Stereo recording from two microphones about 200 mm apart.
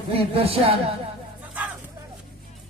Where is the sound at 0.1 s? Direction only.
30° right (ahead or behind).